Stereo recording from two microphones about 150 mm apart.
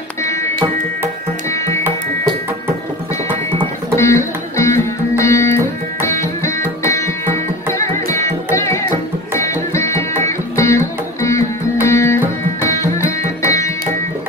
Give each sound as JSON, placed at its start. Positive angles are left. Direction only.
{"t": 0.2, "sound": "music", "side_deg": 20}
{"t": 1.5, "sound": "music", "side_deg": 20}
{"t": 3.9, "sound": "music", "side_deg": 20}